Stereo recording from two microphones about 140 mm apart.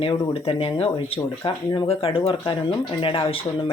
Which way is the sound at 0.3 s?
40° left (ahead or behind).